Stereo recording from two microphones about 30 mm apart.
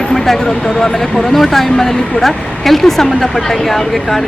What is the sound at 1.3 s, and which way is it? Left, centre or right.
Speech, centre.